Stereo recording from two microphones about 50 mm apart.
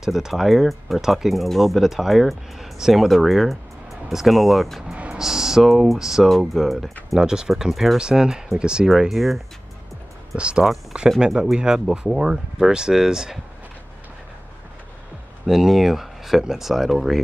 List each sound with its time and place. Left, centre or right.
0.0 s speech: centre
7.2 s speech: centre
8.0 s speech: centre
9.1 s speech: centre
10.3 s speech: right
10.6 s speech: centre
15.4 s speech: centre